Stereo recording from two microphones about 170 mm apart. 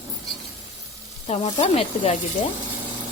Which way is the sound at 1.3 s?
35° left (ahead or behind).